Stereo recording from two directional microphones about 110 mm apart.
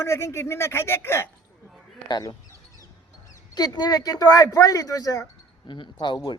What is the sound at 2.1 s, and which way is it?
Speech, 40° left (ahead or behind).